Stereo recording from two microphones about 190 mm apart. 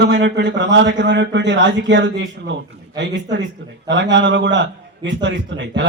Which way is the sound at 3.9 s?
70° right (ahead or behind).